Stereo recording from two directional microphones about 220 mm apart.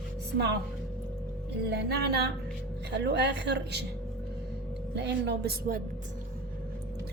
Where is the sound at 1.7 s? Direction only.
50° right (ahead or behind).